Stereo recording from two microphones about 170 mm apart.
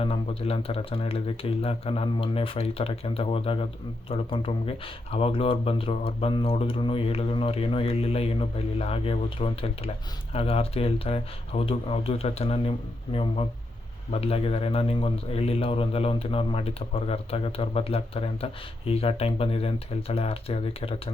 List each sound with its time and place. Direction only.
0.0 s a man's voice: 35° left (ahead or behind)
14.1 s a man's voice: 35° left (ahead or behind)